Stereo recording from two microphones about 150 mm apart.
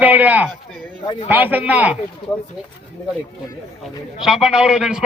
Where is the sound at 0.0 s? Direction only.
10° right (ahead or behind).